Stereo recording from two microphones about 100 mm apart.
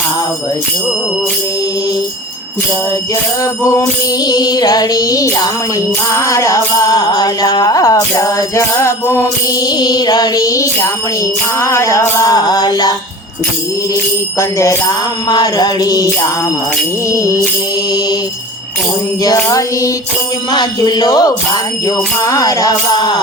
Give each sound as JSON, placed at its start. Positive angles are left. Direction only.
{"t": 3.7, "sound": "music", "side_deg": 35}
{"t": 9.6, "sound": "music", "side_deg": 40}
{"t": 14.3, "sound": "music", "side_deg": 30}
{"t": 15.3, "sound": "music", "side_deg": 45}
{"t": 17.1, "sound": "music", "side_deg": 30}
{"t": 19.2, "sound": "music", "side_deg": 40}
{"t": 20.5, "sound": "speech", "side_deg": 45}
{"t": 21.8, "sound": "music", "side_deg": 35}